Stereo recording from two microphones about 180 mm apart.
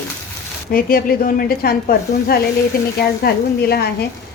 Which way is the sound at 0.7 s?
55° left (ahead or behind).